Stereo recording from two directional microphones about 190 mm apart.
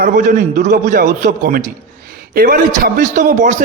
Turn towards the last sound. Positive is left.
turn(degrees=-45)  # may be behind; listen again after turning